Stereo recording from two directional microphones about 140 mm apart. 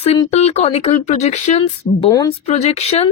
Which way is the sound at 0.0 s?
45° left (ahead or behind).